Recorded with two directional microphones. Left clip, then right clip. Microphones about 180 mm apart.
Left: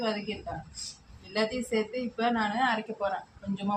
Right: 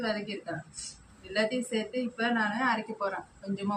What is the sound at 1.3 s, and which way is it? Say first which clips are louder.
A woman's voice: even; 35° left (ahead or behind).